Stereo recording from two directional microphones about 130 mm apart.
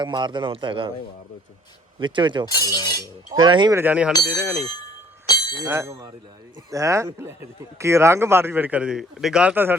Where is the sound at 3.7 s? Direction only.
15° right (ahead or behind).